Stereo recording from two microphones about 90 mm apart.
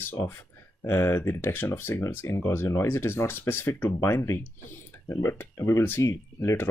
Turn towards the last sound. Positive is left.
turn(degrees=30)  # may be behind; listen again after turning